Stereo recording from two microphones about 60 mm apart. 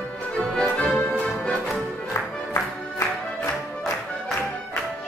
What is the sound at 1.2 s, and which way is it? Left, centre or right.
Music, centre.